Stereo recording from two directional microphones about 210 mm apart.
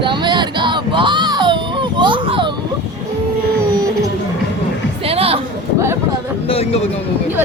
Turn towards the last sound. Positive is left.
turn(degrees=30)  # may be behind; listen again after turning